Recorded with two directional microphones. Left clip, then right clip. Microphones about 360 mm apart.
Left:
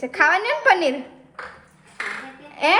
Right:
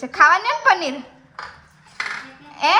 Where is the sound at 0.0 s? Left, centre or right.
Centre.